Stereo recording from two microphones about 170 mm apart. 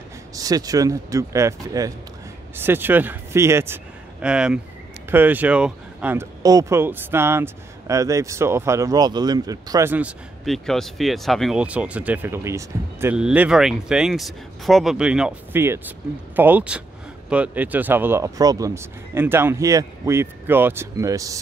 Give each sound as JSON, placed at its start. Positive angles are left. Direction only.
{"t": 0.3, "sound": "a man's voice", "side_deg": -20}
{"t": 6.4, "sound": "speech", "side_deg": -20}